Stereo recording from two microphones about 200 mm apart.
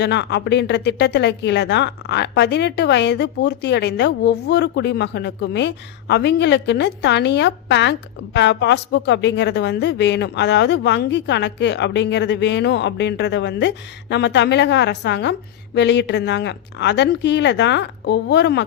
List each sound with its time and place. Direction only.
0.0 s speech: 60° left (ahead or behind)